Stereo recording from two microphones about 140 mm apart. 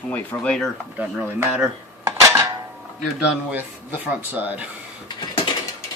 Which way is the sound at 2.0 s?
20° right (ahead or behind).